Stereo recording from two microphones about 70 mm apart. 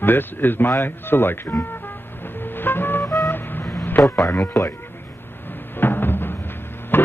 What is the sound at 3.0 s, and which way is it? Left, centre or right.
Vehicle, left.